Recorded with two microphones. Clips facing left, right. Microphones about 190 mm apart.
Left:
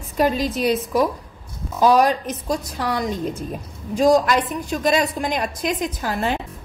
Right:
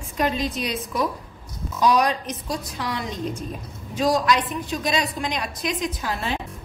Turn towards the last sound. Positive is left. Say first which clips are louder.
# left 4 dB
turn(degrees=50)  # may be behind; listen again after turning